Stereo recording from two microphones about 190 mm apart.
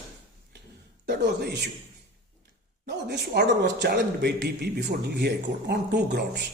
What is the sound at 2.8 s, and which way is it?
A man's voice, 60° right (ahead or behind).